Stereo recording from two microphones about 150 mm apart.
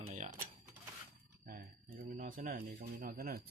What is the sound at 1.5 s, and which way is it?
Speech, 75° right (ahead or behind).